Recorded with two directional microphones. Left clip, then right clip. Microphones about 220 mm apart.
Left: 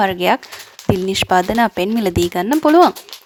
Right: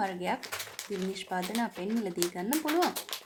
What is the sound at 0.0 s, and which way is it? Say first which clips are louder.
Speech: left 17 dB; 45° left (ahead or behind).